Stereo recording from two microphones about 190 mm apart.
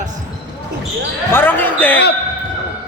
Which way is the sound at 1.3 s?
10° left (ahead or behind).